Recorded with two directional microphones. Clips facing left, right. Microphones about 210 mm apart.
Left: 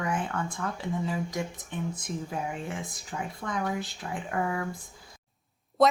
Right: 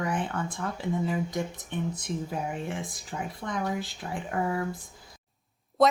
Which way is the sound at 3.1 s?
20° right (ahead or behind).